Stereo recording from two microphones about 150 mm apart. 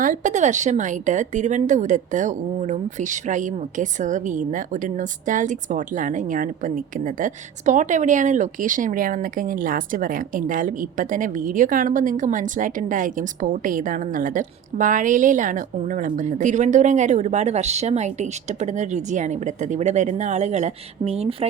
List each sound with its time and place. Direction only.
0.0 s a woman's voice: 60° right (ahead or behind); by 21.3 s 45° right (ahead or behind)